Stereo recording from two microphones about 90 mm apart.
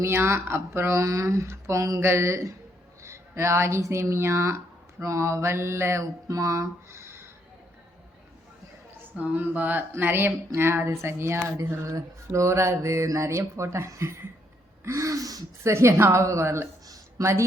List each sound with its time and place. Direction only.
0.0 s speech: 30° right (ahead or behind)
9.1 s speech: 20° right (ahead or behind); by 15.7 s 45° right (ahead or behind)
15.7 s a woman's voice: 30° right (ahead or behind)